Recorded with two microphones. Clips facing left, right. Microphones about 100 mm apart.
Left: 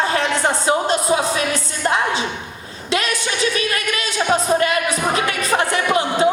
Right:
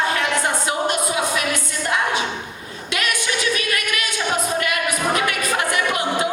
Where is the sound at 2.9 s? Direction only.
30° left (ahead or behind).